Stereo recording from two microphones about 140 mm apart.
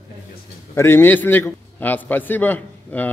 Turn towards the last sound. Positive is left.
turn(degrees=10)  # may be behind; listen again after turning